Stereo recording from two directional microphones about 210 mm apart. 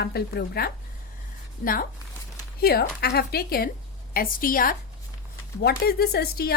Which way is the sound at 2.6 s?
45° left (ahead or behind).